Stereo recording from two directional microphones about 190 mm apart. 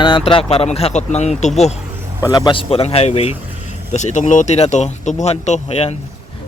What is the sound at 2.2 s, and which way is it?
Speech, 20° left (ahead or behind).